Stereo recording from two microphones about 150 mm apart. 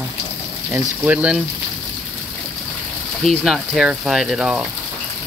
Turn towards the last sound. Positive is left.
turn(degrees=-5)  # may be behind; listen again after turning